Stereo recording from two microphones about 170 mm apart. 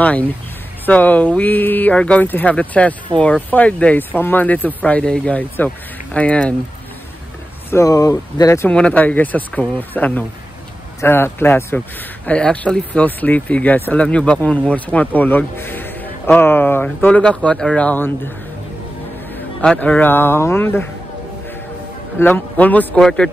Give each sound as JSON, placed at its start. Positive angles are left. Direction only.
{"t": 0.0, "sound": "speech", "side_deg": 10}
{"t": 7.7, "sound": "speech", "side_deg": 20}
{"t": 19.3, "sound": "speech", "side_deg": 5}
{"t": 22.2, "sound": "speech", "side_deg": 10}